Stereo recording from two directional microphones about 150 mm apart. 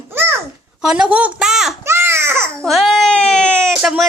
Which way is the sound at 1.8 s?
15° right (ahead or behind).